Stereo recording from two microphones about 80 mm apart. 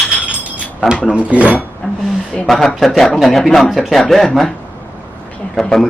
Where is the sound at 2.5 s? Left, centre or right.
Centre.